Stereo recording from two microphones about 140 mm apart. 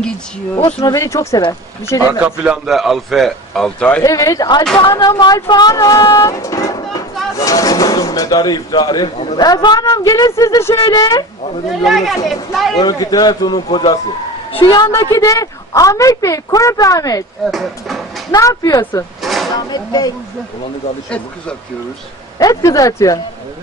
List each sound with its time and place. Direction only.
0.7 s speech: 25° left (ahead or behind)
2.1 s a man's voice: 10° right (ahead or behind)
4.0 s speech: 25° left (ahead or behind)
11.8 s a man's voice: centre (ahead or behind)
12.7 s a woman's voice: 30° left (ahead or behind)
14.9 s speech: 25° left (ahead or behind)
17.5 s speech: centre (ahead or behind)
18.3 s speech: 25° left (ahead or behind)
19.2 s a sound: centre (ahead or behind)
19.5 s speech: 30° left (ahead or behind)
22.4 s speech: 25° left (ahead or behind)